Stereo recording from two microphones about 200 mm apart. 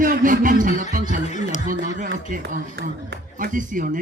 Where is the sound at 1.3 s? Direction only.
35° left (ahead or behind).